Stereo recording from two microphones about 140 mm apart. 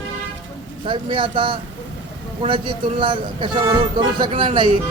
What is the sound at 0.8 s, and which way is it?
A man's voice, 35° right (ahead or behind).